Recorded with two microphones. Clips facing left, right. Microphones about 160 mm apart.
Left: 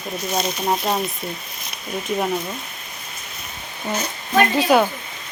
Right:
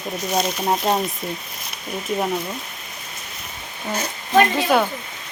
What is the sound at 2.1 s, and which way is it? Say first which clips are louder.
Speech: even; centre (ahead or behind).